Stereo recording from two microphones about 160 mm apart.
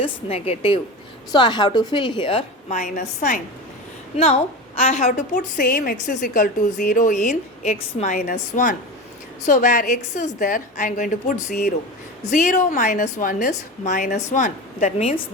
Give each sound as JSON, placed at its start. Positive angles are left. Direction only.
{"t": 0.0, "sound": "a woman's voice", "side_deg": 40}
{"t": 1.3, "sound": "a woman's voice", "side_deg": 25}
{"t": 2.6, "sound": "a woman's voice", "side_deg": 50}
{"t": 4.2, "sound": "a woman's voice", "side_deg": 40}